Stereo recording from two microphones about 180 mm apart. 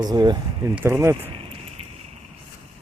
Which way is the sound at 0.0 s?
25° right (ahead or behind).